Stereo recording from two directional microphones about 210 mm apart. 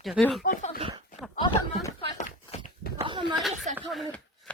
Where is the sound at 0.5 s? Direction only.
40° left (ahead or behind).